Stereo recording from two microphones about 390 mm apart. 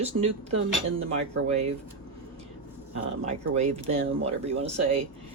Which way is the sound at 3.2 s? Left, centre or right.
Centre.